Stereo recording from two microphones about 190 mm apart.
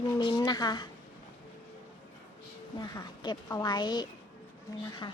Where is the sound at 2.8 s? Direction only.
20° left (ahead or behind).